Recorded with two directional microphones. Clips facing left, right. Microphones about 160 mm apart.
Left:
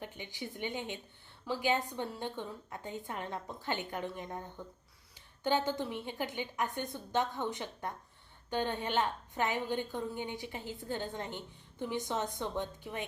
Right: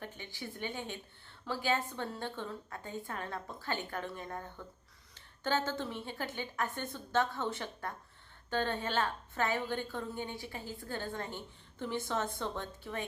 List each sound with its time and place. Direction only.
0.0 s a woman's voice: 15° left (ahead or behind)